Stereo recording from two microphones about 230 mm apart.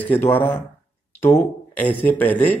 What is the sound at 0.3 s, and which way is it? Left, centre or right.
Speech, centre.